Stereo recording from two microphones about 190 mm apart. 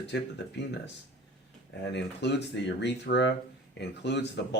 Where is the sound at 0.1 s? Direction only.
65° left (ahead or behind).